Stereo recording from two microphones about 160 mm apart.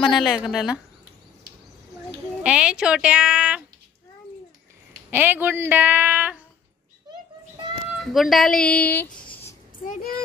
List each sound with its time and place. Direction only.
0.2 s speech: centre (ahead or behind)
2.4 s speech: 5° right (ahead or behind)
5.1 s a woman's voice: 10° right (ahead or behind)
7.9 s speech: centre (ahead or behind)
9.8 s speech: 60° left (ahead or behind)